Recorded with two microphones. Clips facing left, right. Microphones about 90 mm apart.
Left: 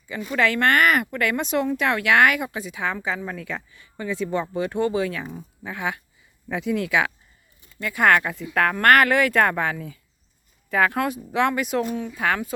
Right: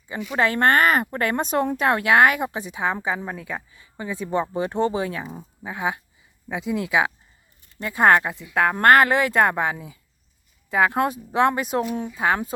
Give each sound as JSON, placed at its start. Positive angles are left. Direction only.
{"t": 0.3, "sound": "speech", "side_deg": -30}